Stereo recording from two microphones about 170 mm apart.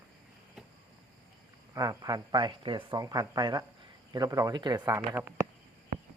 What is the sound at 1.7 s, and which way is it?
Speech, 20° right (ahead or behind).